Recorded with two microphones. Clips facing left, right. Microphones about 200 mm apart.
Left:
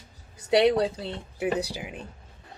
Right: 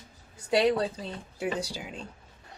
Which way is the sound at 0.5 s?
75° left (ahead or behind).